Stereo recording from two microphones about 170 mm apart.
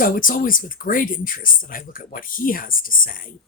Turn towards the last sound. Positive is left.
turn(degrees=55)  # may be behind; listen again after turning